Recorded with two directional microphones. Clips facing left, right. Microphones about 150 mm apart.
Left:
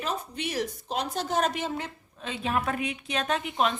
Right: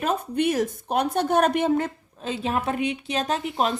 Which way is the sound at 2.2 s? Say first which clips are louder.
Right 3 dB; 35° right (ahead or behind).